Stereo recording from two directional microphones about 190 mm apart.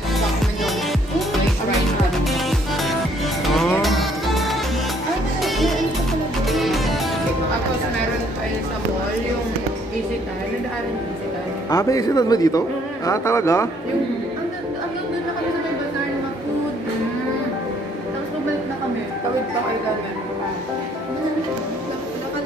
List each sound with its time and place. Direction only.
2.2 s music: centre (ahead or behind)
6.4 s music: centre (ahead or behind)
11.7 s speech: 20° left (ahead or behind)